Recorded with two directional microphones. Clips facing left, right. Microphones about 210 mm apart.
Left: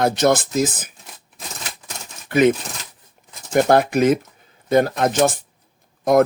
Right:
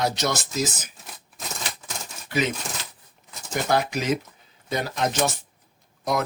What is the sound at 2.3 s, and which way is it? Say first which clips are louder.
Speech: left 10 dB; 55° left (ahead or behind).